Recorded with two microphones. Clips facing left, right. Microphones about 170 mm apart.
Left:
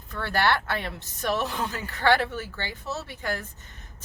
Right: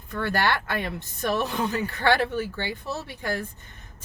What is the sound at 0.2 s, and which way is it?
A woman's voice, 15° right (ahead or behind).